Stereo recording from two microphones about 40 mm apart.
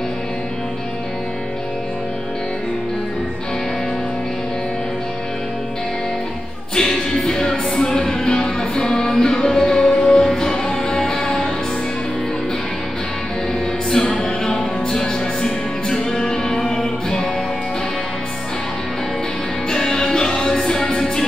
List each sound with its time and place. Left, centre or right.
6.7 s music: centre
13.8 s music: centre
19.7 s music: centre